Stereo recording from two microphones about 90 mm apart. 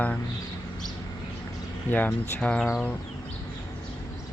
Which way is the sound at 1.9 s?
20° left (ahead or behind).